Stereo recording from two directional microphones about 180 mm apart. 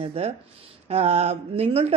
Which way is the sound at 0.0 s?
35° right (ahead or behind).